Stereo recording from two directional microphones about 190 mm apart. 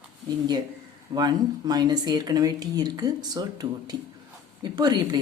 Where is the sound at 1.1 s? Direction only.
20° right (ahead or behind).